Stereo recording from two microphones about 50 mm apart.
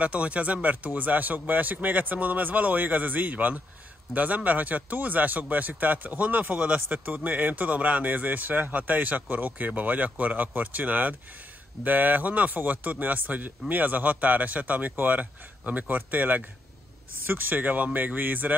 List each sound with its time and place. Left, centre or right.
0.0 s speech: right